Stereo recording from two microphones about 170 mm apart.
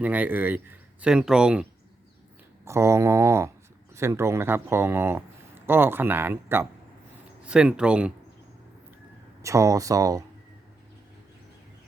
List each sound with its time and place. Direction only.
0.0 s speech: 10° right (ahead or behind)
2.6 s speech: 15° right (ahead or behind)
9.4 s speech: 20° right (ahead or behind)